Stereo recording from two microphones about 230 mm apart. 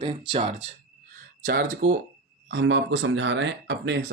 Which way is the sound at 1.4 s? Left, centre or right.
Right.